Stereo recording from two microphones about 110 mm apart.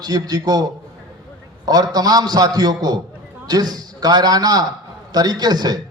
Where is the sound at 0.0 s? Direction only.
35° right (ahead or behind).